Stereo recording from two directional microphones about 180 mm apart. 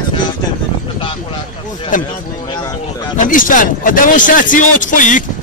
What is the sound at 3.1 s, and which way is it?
Speech, 50° left (ahead or behind).